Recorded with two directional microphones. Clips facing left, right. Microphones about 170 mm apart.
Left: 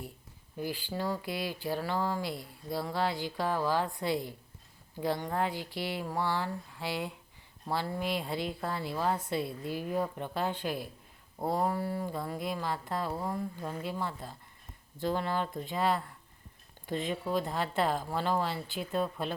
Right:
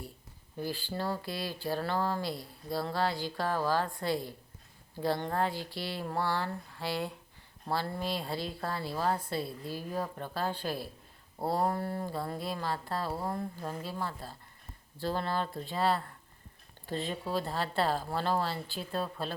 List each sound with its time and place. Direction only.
0.6 s speech: 15° left (ahead or behind)
11.3 s a sound: 5° right (ahead or behind)
11.6 s speech: 10° left (ahead or behind)
12.0 s speech: 5° right (ahead or behind)
12.5 s speech: 15° left (ahead or behind)
13.1 s speech: 5° right (ahead or behind)
13.7 s speech: 20° left (ahead or behind)